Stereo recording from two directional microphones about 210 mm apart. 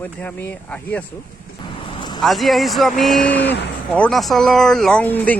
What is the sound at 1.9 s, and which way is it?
Vehicle, 20° left (ahead or behind).